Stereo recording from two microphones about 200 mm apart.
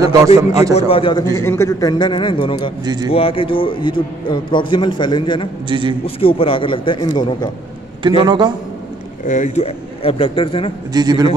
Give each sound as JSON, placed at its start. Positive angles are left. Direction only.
{"t": 0.0, "sound": "a man's voice", "side_deg": -15}
{"t": 0.7, "sound": "a man's voice", "side_deg": 30}
{"t": 1.3, "sound": "a man's voice", "side_deg": 15}
{"t": 2.8, "sound": "a man's voice", "side_deg": -20}
{"t": 3.1, "sound": "a man's voice", "side_deg": 25}
{"t": 5.7, "sound": "a man's voice", "side_deg": -25}
{"t": 6.0, "sound": "a man's voice", "side_deg": 25}
{"t": 8.2, "sound": "a man's voice", "side_deg": -20}
{"t": 9.2, "sound": "a man's voice", "side_deg": 40}
{"t": 10.9, "sound": "a man's voice", "side_deg": -20}